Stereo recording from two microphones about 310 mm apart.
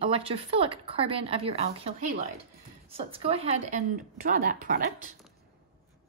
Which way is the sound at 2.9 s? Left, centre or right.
Centre.